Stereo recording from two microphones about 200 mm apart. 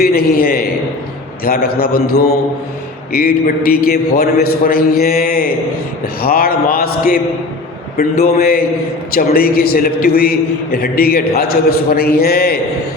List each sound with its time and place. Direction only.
0.0 s a man's voice: 50° left (ahead or behind)